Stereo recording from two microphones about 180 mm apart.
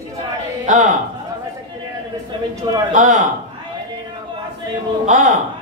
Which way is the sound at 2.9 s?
45° right (ahead or behind).